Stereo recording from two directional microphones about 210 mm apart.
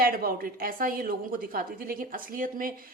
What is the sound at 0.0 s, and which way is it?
A woman's voice, 45° right (ahead or behind).